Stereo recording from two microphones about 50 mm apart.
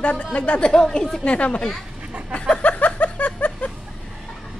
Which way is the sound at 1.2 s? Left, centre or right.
Left.